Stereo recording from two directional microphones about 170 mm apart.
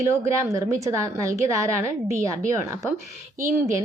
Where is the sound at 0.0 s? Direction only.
15° right (ahead or behind).